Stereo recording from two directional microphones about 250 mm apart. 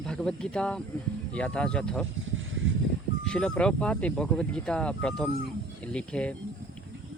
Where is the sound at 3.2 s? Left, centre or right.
Centre.